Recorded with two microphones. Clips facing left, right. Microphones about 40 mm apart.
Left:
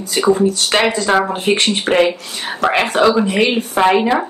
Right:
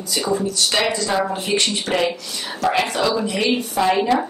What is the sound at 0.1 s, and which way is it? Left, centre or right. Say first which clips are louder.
Speech: left 8 dB; left.